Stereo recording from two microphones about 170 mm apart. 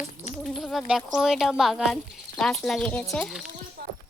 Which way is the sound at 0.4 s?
Centre (ahead or behind).